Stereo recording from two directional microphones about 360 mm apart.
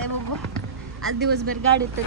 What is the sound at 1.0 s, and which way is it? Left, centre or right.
Speech, right.